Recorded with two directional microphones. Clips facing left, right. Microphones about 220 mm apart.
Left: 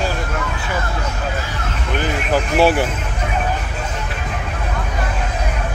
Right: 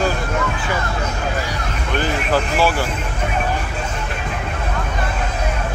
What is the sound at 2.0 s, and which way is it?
Vehicle, 20° left (ahead or behind).